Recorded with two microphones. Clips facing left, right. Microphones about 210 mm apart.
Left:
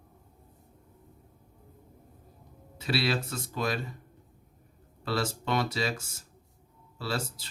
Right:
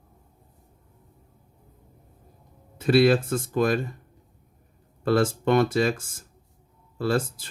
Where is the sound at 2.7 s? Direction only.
50° right (ahead or behind).